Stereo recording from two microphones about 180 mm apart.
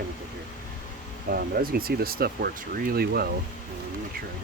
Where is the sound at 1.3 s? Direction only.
55° right (ahead or behind).